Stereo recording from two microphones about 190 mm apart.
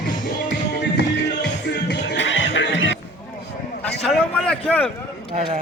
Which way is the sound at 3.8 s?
5° left (ahead or behind).